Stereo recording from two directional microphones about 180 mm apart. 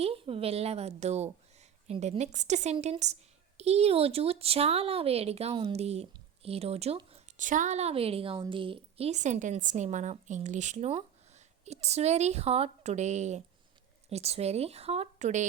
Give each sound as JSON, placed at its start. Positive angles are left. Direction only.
{"t": 0.0, "sound": "a woman's voice", "side_deg": -30}